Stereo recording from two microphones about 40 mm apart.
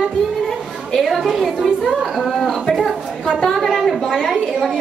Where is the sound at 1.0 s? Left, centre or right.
Centre.